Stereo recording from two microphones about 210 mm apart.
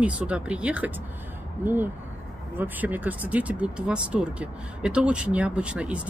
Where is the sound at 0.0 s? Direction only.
5° right (ahead or behind).